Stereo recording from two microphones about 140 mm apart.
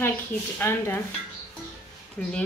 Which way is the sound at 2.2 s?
10° left (ahead or behind).